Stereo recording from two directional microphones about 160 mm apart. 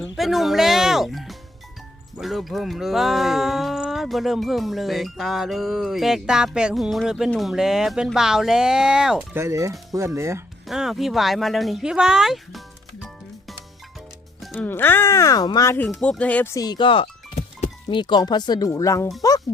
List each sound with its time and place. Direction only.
0.2 s music: centre (ahead or behind)
2.1 s speech: centre (ahead or behind)
9.4 s speech: 20° right (ahead or behind)
10.7 s speech: centre (ahead or behind)
14.4 s music: centre (ahead or behind)
14.7 s speech: 15° left (ahead or behind)
15.9 s speech: 5° left (ahead or behind)
19.2 s music: 20° left (ahead or behind)